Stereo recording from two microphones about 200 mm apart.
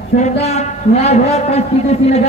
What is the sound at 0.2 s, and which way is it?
A man's voice, 35° left (ahead or behind).